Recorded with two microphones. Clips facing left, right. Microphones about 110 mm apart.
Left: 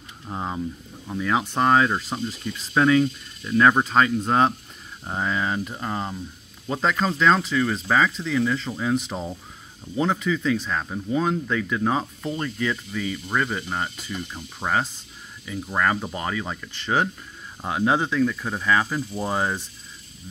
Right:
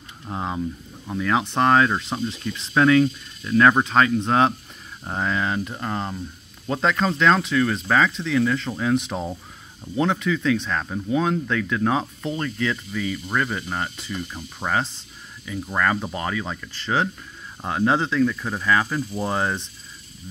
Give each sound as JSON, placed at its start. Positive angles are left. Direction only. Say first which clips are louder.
{"t": 0.3, "sound": "speech", "louder": "right 1 dB", "side_deg": -5}
{"t": 1.1, "sound": "speech", "louder": "right 1 dB", "side_deg": 10}
{"t": 3.7, "sound": "speech", "louder": "right 1 dB", "side_deg": 5}
{"t": 12.0, "sound": "speech", "louder": "right 1 dB", "side_deg": 0}
{"t": 12.4, "sound": "speech", "louder": "right 1 dB", "side_deg": 25}
{"t": 15.6, "sound": "speech", "louder": "even", "side_deg": 15}